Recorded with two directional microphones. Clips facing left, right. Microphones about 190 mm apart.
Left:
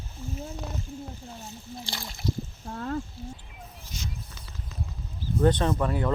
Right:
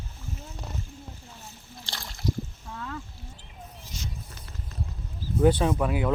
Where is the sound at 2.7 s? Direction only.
45° left (ahead or behind).